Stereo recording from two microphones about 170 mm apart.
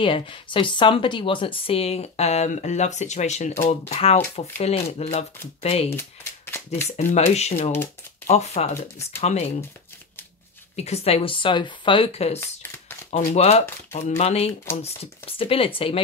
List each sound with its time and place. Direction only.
0.0 s a woman's voice: 30° left (ahead or behind)
5.9 s shuffling cards: 15° left (ahead or behind)
7.0 s a woman's voice: 40° left (ahead or behind)
10.8 s a woman's voice: 40° left (ahead or behind)